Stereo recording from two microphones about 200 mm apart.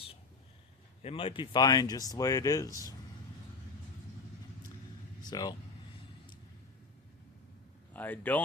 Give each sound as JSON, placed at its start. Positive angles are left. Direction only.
{"t": 1.0, "sound": "speech", "side_deg": 25}
{"t": 5.2, "sound": "speech", "side_deg": 20}
{"t": 7.9, "sound": "speech", "side_deg": 10}